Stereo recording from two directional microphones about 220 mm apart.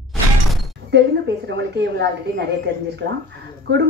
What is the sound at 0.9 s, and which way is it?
A woman's voice, 50° right (ahead or behind).